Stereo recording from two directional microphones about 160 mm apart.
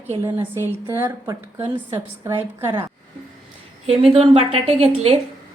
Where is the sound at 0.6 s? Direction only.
15° right (ahead or behind).